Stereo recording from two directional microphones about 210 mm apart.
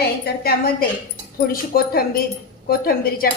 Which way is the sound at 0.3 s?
45° left (ahead or behind).